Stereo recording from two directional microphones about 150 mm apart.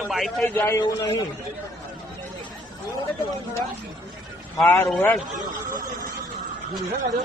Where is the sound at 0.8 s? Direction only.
30° left (ahead or behind).